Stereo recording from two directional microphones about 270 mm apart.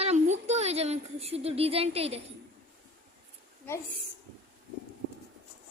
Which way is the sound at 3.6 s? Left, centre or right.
Centre.